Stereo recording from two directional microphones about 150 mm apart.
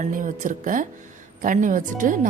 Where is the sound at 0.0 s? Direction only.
60° right (ahead or behind).